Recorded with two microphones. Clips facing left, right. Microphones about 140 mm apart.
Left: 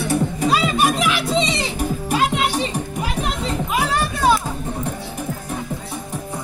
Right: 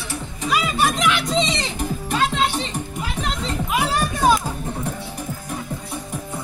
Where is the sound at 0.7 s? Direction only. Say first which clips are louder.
Left 1 dB; 10° left (ahead or behind).